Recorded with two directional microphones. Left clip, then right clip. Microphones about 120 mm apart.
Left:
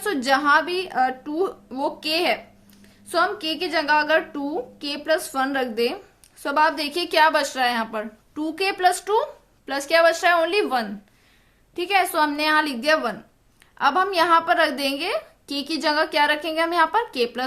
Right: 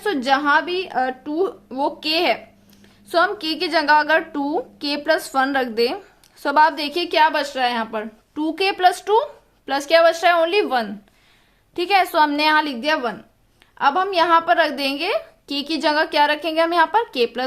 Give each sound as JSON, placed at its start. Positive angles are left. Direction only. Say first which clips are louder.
{"t": 0.0, "sound": "a woman's voice", "louder": "right 2 dB", "side_deg": -20}
{"t": 11.7, "sound": "a woman's voice", "louder": "right 3 dB", "side_deg": -40}
{"t": 12.8, "sound": "a woman's voice", "louder": "even", "side_deg": -15}